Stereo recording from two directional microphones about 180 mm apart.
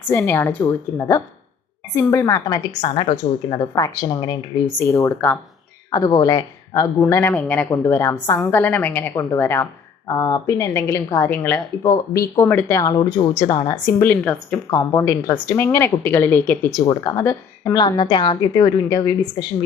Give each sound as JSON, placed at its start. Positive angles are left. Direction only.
{"t": 0.1, "sound": "a woman's voice", "side_deg": 15}
{"t": 12.4, "sound": "a woman's voice", "side_deg": 10}